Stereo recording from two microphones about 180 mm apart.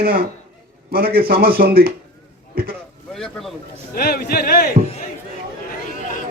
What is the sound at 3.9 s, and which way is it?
Speech, 55° left (ahead or behind).